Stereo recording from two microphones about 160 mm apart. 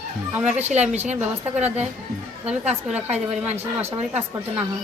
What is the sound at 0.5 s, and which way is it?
Speech, 45° right (ahead or behind).